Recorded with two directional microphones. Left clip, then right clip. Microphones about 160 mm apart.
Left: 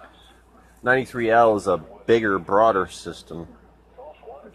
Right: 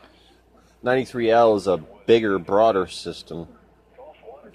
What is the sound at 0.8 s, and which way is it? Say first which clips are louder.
Speech: left 1 dB; 50° right (ahead or behind).